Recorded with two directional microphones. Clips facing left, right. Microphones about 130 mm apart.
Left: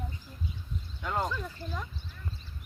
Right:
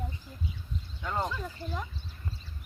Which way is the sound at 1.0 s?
5° left (ahead or behind).